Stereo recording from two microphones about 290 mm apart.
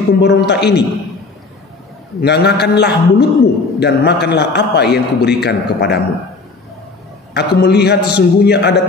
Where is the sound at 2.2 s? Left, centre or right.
Left.